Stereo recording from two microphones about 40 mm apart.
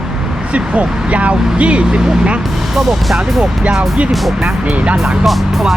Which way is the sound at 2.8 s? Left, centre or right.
Centre.